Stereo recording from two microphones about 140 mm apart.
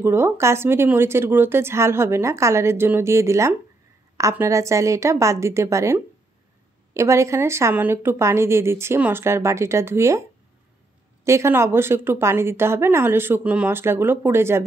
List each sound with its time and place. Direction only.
0.0 s a woman's voice: 15° right (ahead or behind)
11.2 s speech: 20° right (ahead or behind)